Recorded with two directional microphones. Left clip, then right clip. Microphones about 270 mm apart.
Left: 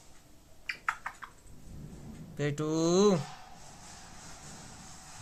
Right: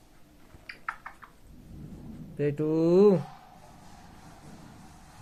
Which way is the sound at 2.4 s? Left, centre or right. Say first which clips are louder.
Right 4 dB; left.